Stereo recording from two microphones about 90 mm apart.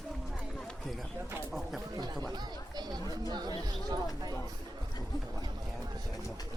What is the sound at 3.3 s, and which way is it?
Chatter, 50° right (ahead or behind).